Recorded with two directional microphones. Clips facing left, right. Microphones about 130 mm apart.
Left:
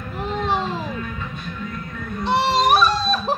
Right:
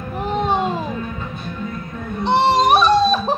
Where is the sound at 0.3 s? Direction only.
20° right (ahead or behind).